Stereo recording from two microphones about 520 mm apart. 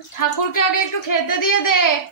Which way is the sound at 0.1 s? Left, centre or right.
Left.